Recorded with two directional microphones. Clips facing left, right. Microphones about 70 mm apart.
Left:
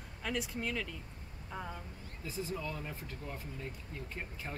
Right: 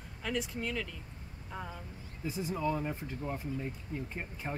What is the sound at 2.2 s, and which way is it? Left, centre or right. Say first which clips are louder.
Speech: right 6 dB; centre.